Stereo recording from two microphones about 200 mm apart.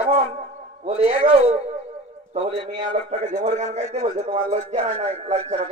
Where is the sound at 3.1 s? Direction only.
40° right (ahead or behind).